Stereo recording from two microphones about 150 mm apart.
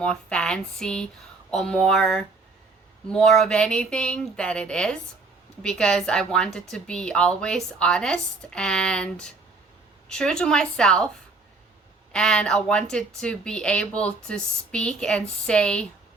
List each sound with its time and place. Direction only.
0.0 s speech: 5° left (ahead or behind)
12.1 s speech: 5° left (ahead or behind)